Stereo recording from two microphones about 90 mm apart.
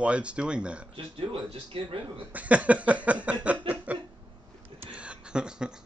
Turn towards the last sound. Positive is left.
turn(degrees=-10)  # may be behind; listen again after turning